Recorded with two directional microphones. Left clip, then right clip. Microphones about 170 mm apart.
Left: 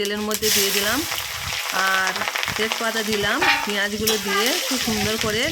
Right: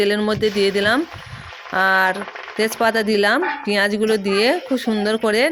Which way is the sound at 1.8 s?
35° right (ahead or behind).